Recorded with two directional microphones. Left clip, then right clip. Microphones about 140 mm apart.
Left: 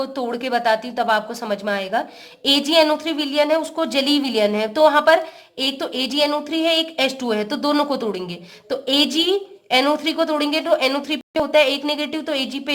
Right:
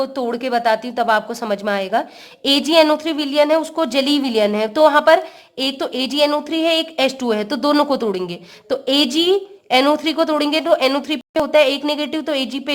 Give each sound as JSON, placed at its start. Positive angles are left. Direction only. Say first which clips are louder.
{"t": 0.0, "sound": "speech", "louder": "right 3 dB", "side_deg": -25}